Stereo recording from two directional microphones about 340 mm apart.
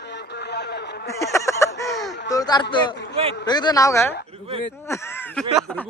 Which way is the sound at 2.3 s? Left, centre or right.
Centre.